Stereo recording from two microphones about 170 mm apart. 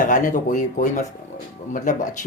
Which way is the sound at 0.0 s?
50° left (ahead or behind).